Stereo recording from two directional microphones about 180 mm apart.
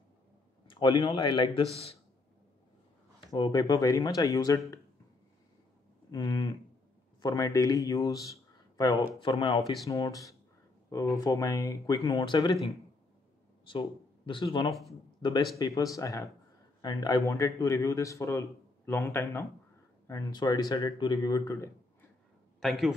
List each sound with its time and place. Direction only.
0.7 s speech: 25° left (ahead or behind)
3.3 s speech: 25° left (ahead or behind)
6.1 s speech: 25° left (ahead or behind)
13.7 s speech: 25° left (ahead or behind)
14.7 s a man's voice: centre (ahead or behind)
15.5 s speech: 20° left (ahead or behind)
22.6 s a man's voice: centre (ahead or behind)